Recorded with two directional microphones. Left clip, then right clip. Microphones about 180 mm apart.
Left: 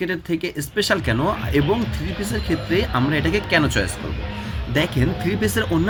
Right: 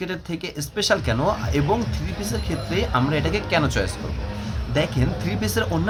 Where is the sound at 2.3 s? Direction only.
5° left (ahead or behind).